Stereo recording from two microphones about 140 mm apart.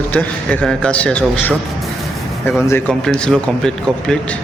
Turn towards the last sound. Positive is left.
turn(degrees=5)  # may be behind; listen again after turning